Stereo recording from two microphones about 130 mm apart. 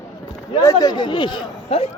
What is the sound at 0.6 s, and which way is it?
Speech, 30° left (ahead or behind).